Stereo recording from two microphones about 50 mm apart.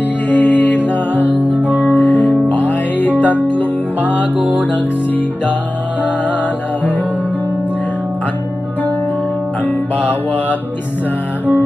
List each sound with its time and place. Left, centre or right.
0.3 s music: left
4.4 s music: right